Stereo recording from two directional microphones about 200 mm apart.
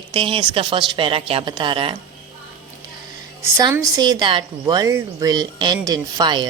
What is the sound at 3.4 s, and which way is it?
A woman's voice, 15° right (ahead or behind).